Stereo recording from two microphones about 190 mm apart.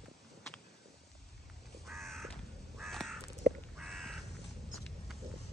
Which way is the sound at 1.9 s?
Centre (ahead or behind).